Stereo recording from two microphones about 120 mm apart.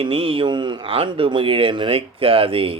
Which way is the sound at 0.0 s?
50° right (ahead or behind).